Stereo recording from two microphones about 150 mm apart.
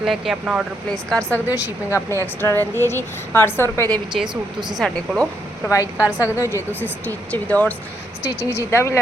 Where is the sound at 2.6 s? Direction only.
15° left (ahead or behind).